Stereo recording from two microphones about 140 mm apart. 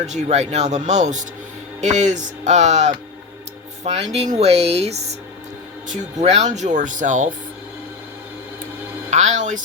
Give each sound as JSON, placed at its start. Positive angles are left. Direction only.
{"t": 0.0, "sound": "speech", "side_deg": -55}
{"t": 9.0, "sound": "speech", "side_deg": -55}